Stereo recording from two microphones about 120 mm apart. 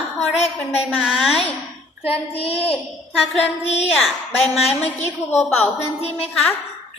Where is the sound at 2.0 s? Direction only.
55° left (ahead or behind).